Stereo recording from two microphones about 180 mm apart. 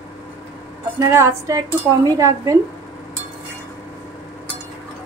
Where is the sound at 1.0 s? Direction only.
15° right (ahead or behind).